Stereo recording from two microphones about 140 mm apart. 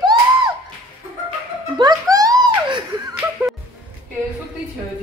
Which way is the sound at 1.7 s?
30° right (ahead or behind).